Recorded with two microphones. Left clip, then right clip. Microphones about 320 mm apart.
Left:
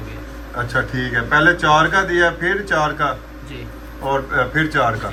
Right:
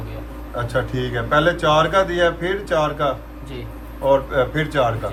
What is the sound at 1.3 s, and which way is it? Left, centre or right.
Speech, centre.